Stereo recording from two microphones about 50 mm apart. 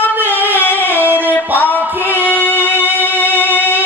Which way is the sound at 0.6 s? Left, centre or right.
Left.